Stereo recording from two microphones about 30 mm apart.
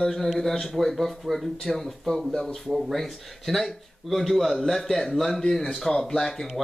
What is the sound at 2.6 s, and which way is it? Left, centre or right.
A man's voice, centre.